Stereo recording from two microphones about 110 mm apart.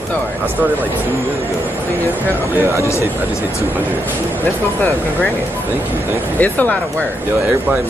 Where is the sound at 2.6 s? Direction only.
25° right (ahead or behind).